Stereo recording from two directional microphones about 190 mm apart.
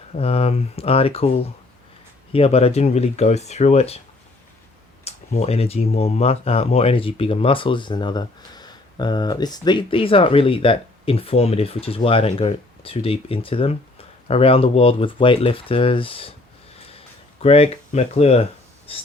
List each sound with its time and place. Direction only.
0.2 s speech: 30° left (ahead or behind)
5.0 s speech: 35° left (ahead or behind)
17.4 s speech: 30° left (ahead or behind)